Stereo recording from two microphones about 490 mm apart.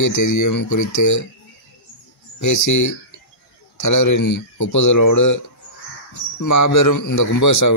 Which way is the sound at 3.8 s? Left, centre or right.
Left.